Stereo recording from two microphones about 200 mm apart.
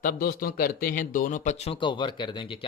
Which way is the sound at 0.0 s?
45° left (ahead or behind).